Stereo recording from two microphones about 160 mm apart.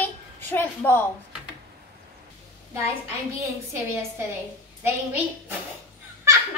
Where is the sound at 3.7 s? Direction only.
15° right (ahead or behind).